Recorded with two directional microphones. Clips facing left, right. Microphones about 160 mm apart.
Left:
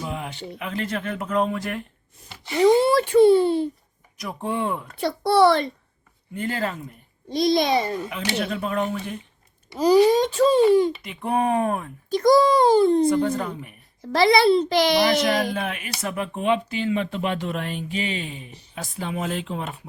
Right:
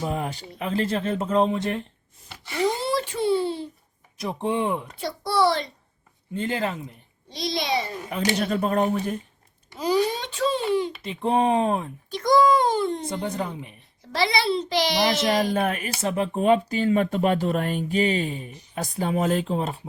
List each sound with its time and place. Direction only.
0.0 s speech: 40° right (ahead or behind)
2.8 s a child's voice: 60° left (ahead or behind)
4.2 s speech: 25° right (ahead or behind)
4.9 s a child's voice: 60° left (ahead or behind)
6.3 s speech: 20° right (ahead or behind)
7.3 s a child's voice: 50° left (ahead or behind)
8.1 s speech: 40° right (ahead or behind)
9.7 s a child's voice: 40° left (ahead or behind)
11.0 s speech: 30° right (ahead or behind)
12.1 s a child's voice: 40° left (ahead or behind)
13.1 s speech: 20° right (ahead or behind)
14.1 s a child's voice: 50° left (ahead or behind)
15.5 s speech: 45° right (ahead or behind)
16.0 s speech: 30° right (ahead or behind)